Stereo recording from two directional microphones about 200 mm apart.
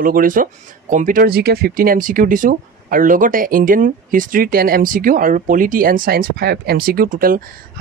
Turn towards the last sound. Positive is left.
turn(degrees=-45)  # may be behind; listen again after turning